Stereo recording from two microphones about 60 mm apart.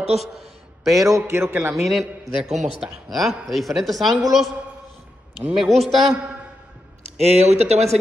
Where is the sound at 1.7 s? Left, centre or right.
Centre.